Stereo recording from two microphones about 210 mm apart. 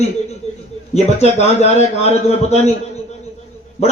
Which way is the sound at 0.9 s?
30° left (ahead or behind).